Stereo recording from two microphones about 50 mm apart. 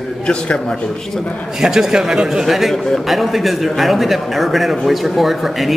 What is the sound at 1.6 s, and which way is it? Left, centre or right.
Speech, centre.